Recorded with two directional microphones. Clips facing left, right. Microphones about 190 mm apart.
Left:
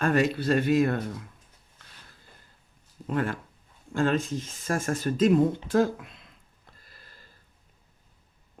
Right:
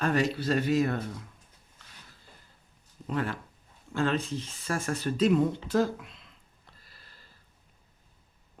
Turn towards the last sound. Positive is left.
turn(degrees=45)  # may be behind; listen again after turning